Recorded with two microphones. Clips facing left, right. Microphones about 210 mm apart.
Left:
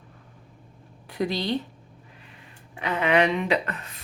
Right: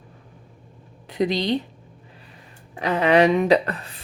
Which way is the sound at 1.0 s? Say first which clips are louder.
Right 5 dB; 20° right (ahead or behind).